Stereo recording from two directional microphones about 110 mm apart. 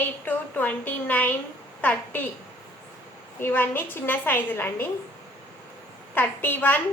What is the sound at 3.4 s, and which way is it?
A woman's voice, 20° left (ahead or behind).